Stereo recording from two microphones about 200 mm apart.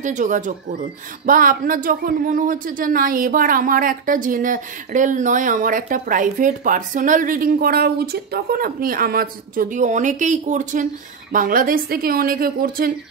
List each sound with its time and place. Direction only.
0.0 s speech: 40° right (ahead or behind)